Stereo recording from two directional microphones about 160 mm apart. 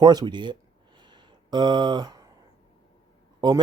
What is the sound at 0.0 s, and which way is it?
Speech, 25° right (ahead or behind).